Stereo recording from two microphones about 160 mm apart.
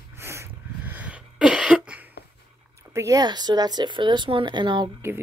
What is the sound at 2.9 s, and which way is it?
Speech, 20° right (ahead or behind).